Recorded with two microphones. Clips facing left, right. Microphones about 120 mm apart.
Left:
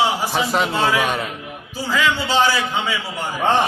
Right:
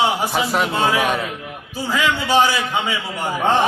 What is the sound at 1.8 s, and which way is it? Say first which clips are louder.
Speech: even; 15° right (ahead or behind).